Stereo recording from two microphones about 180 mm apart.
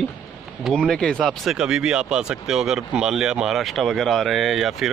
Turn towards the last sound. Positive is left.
turn(degrees=0)  # may be behind; listen again after turning